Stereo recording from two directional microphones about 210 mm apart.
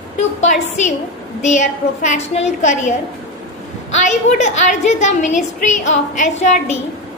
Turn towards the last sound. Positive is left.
turn(degrees=35)  # may be behind; listen again after turning